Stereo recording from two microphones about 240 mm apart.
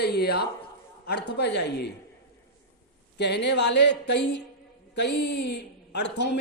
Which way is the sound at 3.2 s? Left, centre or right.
Left.